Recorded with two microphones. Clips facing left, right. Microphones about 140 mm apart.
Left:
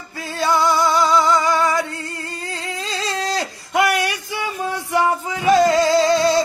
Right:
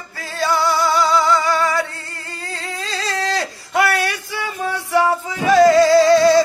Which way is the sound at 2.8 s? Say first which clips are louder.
Right 1 dB; 20° left (ahead or behind).